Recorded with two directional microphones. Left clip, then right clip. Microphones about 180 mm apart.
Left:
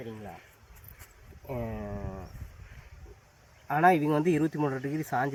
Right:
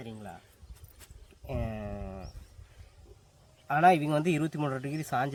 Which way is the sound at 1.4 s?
15° right (ahead or behind).